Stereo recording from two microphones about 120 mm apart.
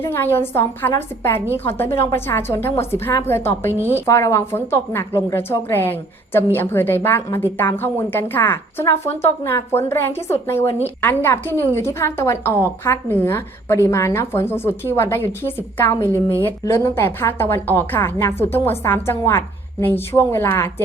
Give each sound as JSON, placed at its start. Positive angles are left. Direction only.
{"t": 0.0, "sound": "a woman's voice", "side_deg": 20}